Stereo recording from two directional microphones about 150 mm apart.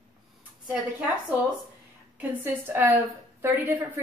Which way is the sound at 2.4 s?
15° right (ahead or behind).